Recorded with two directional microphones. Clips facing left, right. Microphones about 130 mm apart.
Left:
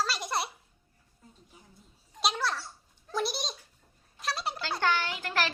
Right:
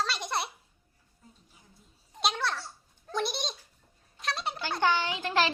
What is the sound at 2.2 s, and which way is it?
Babbling, centre (ahead or behind).